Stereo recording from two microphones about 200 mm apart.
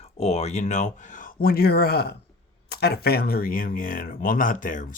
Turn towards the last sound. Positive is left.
turn(degrees=40)  # may be behind; listen again after turning